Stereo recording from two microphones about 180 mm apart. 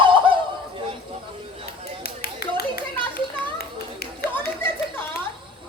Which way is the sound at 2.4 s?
60° left (ahead or behind).